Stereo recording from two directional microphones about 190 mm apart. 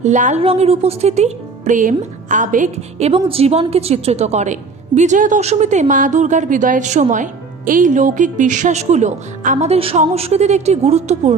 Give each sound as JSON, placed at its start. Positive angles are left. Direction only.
{"t": 0.0, "sound": "a woman's voice", "side_deg": -40}
{"t": 3.1, "sound": "a woman's voice", "side_deg": -30}